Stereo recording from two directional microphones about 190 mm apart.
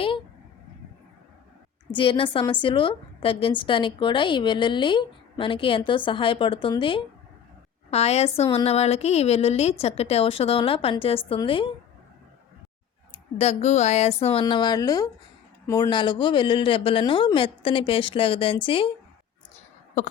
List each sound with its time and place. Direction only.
1.9 s a woman's voice: 25° left (ahead or behind)
13.4 s a woman's voice: 35° left (ahead or behind)